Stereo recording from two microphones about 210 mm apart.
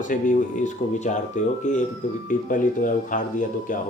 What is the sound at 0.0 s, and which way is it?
Speech, 35° left (ahead or behind).